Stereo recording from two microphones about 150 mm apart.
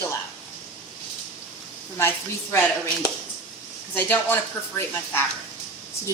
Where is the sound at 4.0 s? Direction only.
15° left (ahead or behind).